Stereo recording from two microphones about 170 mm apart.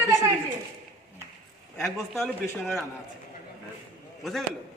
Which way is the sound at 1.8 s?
Centre (ahead or behind).